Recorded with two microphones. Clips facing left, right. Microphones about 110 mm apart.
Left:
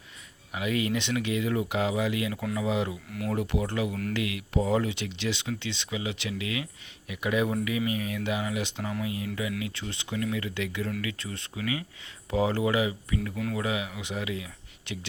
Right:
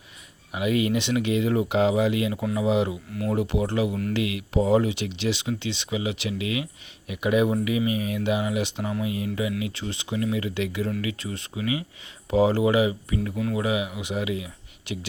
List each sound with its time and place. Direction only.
0.5 s speech: 20° right (ahead or behind)
3.1 s speech: 5° right (ahead or behind)
3.3 s speech: 20° right (ahead or behind)